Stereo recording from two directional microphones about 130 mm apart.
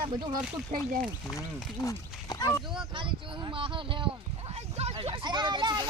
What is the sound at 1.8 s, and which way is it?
Speech, 25° left (ahead or behind).